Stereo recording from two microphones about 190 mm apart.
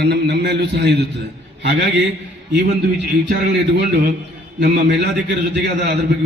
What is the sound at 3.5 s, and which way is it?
A man's voice, 60° right (ahead or behind).